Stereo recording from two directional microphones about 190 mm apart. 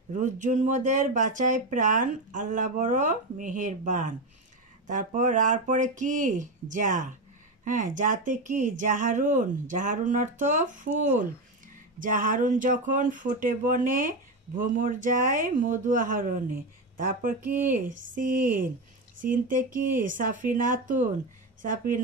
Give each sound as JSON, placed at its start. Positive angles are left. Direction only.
{"t": 0.1, "sound": "speech", "side_deg": -40}
{"t": 17.4, "sound": "speech", "side_deg": -10}
{"t": 18.1, "sound": "speech", "side_deg": -45}